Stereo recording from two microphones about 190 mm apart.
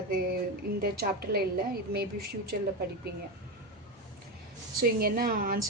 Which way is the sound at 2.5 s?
50° right (ahead or behind).